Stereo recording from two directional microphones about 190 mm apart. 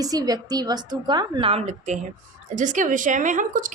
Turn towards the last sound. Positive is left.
turn(degrees=-45)  # may be behind; listen again after turning